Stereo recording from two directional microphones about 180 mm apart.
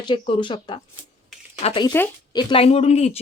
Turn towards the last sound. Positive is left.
turn(degrees=35)  # may be behind; listen again after turning